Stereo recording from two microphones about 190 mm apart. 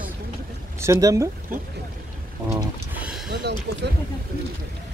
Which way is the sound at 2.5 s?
10° right (ahead or behind).